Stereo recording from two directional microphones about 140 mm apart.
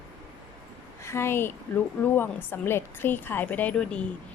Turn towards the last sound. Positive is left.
turn(degrees=10)  # may be behind; listen again after turning